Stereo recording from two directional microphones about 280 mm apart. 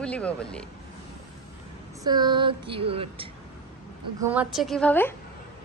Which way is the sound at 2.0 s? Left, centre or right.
Centre.